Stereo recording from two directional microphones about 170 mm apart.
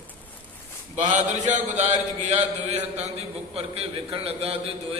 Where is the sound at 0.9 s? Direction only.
45° right (ahead or behind).